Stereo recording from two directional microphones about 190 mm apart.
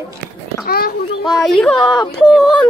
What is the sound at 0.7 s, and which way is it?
Speech, 55° left (ahead or behind).